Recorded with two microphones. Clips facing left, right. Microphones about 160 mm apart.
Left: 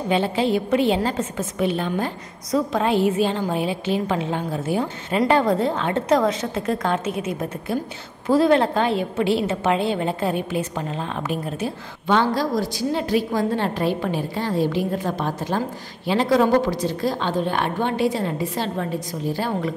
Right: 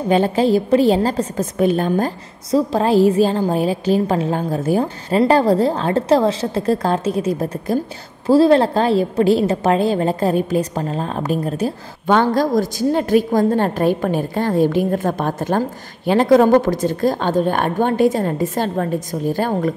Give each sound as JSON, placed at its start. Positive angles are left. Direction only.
{"t": 0.1, "sound": "a woman's voice", "side_deg": -45}